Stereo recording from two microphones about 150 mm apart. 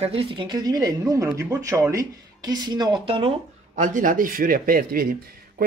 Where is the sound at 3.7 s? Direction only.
55° right (ahead or behind); by 5.1 s 70° right (ahead or behind).